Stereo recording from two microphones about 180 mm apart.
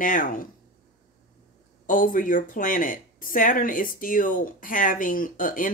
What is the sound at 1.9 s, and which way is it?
A woman's voice, 50° left (ahead or behind).